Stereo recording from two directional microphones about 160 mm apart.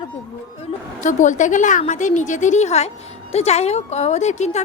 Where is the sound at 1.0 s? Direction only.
50° left (ahead or behind).